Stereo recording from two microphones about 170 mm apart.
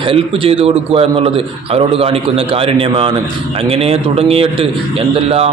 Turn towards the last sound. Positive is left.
turn(degrees=-35)  # may be behind; listen again after turning